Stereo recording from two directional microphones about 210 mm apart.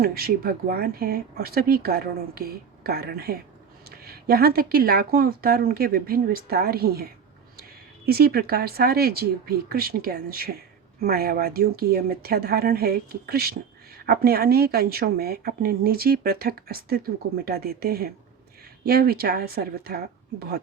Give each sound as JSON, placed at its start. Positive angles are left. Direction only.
{"t": 0.0, "sound": "speech", "side_deg": -45}